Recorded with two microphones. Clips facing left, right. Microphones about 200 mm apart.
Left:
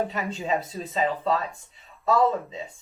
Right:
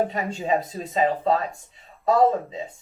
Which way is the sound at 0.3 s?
40° right (ahead or behind).